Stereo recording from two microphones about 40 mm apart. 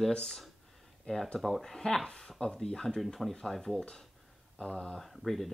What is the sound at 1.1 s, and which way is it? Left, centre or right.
Speech, left.